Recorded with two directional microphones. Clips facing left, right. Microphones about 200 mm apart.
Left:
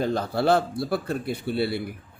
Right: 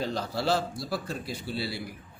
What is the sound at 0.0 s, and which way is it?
Speech, 55° left (ahead or behind).